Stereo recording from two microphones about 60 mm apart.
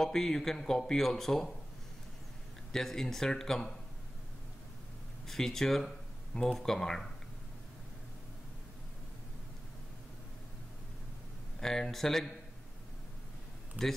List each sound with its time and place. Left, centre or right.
0.0 s speech: centre
2.7 s speech: centre
5.2 s speech: centre
11.6 s speech: centre
13.8 s speech: right